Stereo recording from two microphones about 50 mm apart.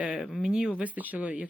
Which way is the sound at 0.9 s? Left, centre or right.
Right.